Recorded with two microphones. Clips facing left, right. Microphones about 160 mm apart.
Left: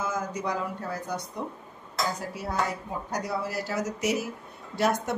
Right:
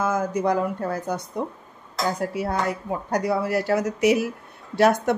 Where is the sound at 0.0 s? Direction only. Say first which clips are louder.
Right 8 dB; 55° right (ahead or behind).